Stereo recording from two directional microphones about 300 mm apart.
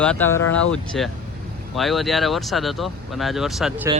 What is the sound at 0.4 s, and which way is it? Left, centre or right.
Speech, left.